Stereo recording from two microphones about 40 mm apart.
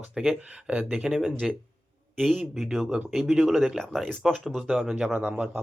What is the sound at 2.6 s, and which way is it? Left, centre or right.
Speech, centre.